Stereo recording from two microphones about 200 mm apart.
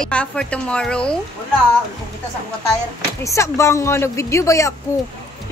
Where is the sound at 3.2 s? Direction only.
15° left (ahead or behind).